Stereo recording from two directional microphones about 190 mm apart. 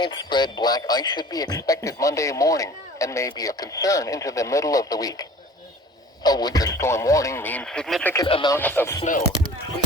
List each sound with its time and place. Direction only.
0.0 s speech: 25° left (ahead or behind)
6.2 s speech: 20° left (ahead or behind); by 8.1 s centre (ahead or behind)
8.1 s speech: 25° left (ahead or behind)
8.5 s speech: 10° left (ahead or behind)